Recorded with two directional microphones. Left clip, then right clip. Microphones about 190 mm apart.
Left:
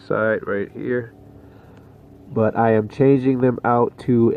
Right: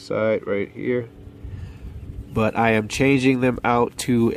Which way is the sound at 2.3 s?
40° right (ahead or behind).